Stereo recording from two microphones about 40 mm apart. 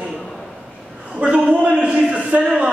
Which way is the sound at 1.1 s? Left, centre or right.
Right.